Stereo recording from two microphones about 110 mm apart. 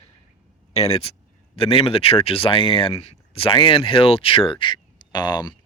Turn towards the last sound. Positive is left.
turn(degrees=40)  # may be behind; listen again after turning